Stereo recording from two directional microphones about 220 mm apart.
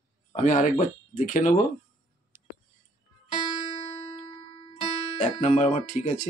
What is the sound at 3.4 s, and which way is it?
Music, 20° left (ahead or behind).